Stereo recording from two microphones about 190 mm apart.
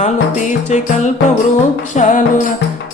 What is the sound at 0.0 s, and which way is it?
Music, 40° left (ahead or behind).